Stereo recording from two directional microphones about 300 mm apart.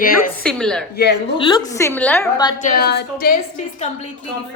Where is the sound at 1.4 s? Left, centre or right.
Centre.